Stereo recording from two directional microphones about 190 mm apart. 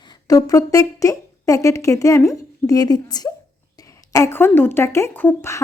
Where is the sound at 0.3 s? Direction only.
20° left (ahead or behind).